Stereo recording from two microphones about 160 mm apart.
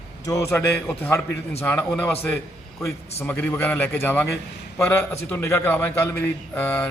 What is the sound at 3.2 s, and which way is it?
A man's voice, 10° left (ahead or behind).